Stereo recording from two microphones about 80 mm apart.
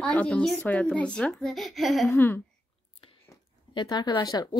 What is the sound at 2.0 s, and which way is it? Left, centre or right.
Speech, left.